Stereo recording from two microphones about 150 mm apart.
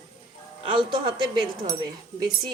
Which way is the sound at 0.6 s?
35° right (ahead or behind).